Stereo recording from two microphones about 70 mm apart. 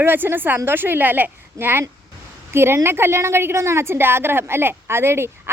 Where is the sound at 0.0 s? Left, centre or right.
Right.